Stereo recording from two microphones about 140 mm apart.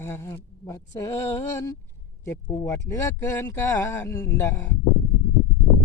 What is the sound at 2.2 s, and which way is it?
Speech, 20° left (ahead or behind).